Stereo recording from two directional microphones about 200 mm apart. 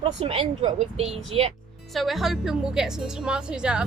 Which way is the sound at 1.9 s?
Centre (ahead or behind).